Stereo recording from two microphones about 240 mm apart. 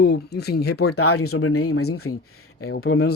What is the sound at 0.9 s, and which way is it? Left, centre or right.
Speech, left.